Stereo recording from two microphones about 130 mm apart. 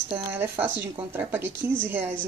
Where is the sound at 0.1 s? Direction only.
15° right (ahead or behind).